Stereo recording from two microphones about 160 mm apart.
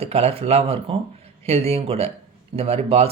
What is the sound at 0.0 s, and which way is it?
Speech, 40° right (ahead or behind).